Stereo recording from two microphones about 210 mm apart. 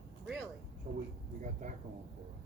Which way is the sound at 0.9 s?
35° right (ahead or behind).